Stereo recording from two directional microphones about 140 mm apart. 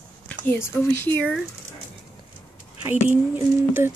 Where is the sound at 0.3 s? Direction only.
15° left (ahead or behind).